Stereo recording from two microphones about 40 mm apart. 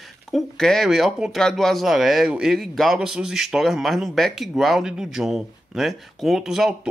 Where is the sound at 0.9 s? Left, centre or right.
Centre.